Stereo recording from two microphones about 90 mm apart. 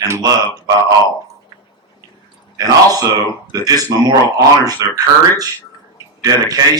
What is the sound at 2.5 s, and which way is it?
Speech, 45° right (ahead or behind).